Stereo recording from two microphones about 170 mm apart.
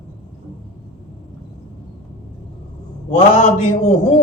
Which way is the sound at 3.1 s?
45° left (ahead or behind).